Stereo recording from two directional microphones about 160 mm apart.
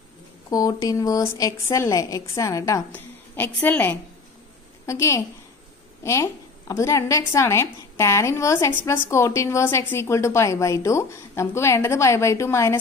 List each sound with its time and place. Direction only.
0.5 s a woman's voice: 25° left (ahead or behind)